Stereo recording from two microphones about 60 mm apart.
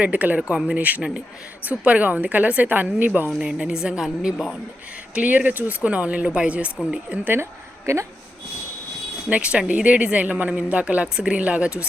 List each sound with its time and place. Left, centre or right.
0.0 s speech: right
3.3 s speech: centre
5.1 s speech: right
7.9 s speech: right
9.3 s speech: centre